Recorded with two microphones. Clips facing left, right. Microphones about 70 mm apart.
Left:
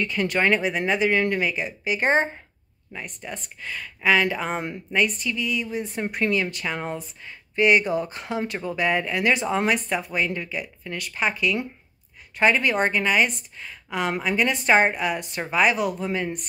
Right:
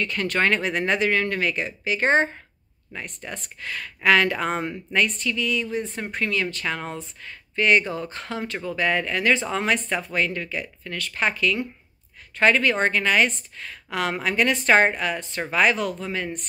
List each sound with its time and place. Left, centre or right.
0.0 s speech: centre
2.9 s speech: centre
6.0 s speech: centre
9.8 s speech: centre